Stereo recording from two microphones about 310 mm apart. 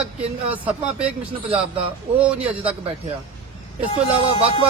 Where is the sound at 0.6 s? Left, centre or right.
Centre.